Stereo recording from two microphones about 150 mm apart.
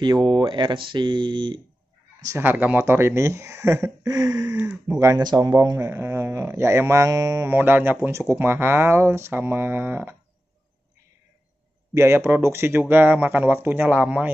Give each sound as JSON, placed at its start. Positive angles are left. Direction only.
{"t": 0.0, "sound": "speech", "side_deg": -30}
{"t": 2.2, "sound": "speech", "side_deg": -15}
{"t": 4.6, "sound": "speech", "side_deg": -10}
{"t": 4.9, "sound": "speech", "side_deg": -25}
{"t": 11.9, "sound": "speech", "side_deg": -15}